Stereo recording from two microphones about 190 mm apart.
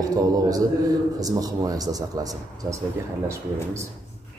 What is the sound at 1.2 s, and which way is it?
Speech, 20° right (ahead or behind).